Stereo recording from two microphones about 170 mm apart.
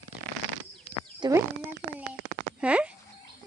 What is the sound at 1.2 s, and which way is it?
Speech, 20° right (ahead or behind).